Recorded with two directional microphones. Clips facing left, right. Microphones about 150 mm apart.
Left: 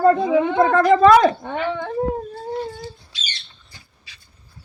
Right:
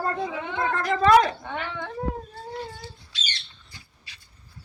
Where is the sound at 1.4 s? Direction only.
40° left (ahead or behind).